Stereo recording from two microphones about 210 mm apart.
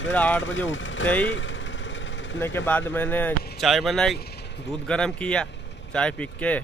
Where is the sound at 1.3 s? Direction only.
60° left (ahead or behind).